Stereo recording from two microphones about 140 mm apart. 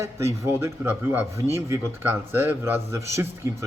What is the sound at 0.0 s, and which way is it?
A man's voice, 20° right (ahead or behind).